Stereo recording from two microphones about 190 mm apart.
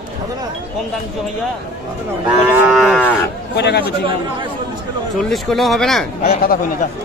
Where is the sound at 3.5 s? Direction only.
60° left (ahead or behind).